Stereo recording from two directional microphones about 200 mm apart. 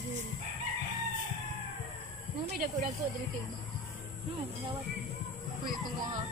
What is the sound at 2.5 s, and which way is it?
Speech, 35° right (ahead or behind).